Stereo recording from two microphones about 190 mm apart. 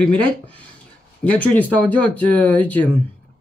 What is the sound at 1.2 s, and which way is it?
Speech, 10° left (ahead or behind).